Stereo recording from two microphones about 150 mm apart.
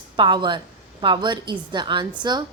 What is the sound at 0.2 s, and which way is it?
A woman's voice, 30° right (ahead or behind).